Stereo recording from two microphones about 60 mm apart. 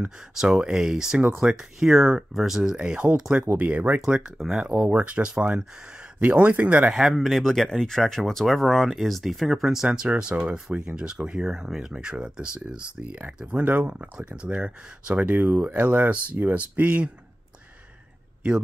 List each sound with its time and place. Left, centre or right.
0.3 s speech: centre
2.7 s speech: centre
4.0 s speech: centre
4.6 s speech: right
6.9 s speech: centre
7.2 s speech: centre; by 17.1 s right